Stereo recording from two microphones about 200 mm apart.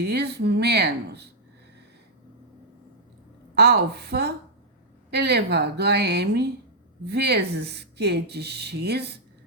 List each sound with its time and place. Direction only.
0.0 s speech: 55° right (ahead or behind)
3.5 s speech: 55° right (ahead or behind)